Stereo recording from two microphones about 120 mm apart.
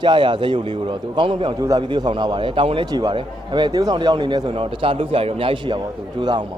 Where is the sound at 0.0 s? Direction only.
40° right (ahead or behind).